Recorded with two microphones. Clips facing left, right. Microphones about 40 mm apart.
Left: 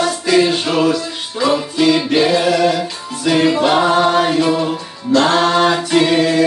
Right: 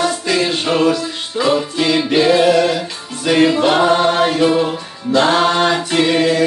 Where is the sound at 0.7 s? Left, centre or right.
Right.